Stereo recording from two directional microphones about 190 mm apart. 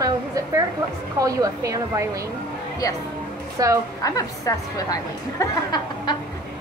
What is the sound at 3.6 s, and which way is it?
Speech, 20° right (ahead or behind).